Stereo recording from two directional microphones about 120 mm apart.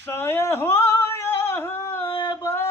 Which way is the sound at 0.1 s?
20° left (ahead or behind).